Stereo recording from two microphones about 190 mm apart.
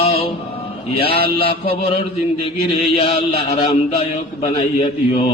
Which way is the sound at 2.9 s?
35° left (ahead or behind).